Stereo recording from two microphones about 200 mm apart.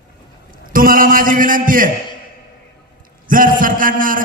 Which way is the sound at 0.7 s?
45° right (ahead or behind).